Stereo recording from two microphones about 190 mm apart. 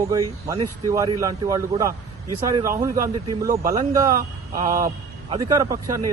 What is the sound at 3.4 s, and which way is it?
Speech, 45° right (ahead or behind).